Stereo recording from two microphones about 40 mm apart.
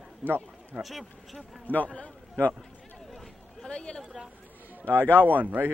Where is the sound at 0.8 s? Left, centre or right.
Centre.